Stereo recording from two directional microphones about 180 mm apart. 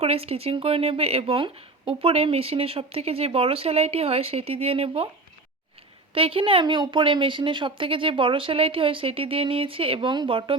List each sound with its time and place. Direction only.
0.0 s speech: 35° right (ahead or behind)
6.1 s a woman's voice: 30° right (ahead or behind)